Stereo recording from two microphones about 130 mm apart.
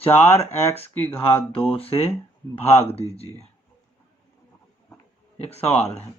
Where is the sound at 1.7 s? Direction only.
45° left (ahead or behind).